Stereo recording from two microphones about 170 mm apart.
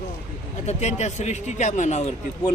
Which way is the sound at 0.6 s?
40° left (ahead or behind).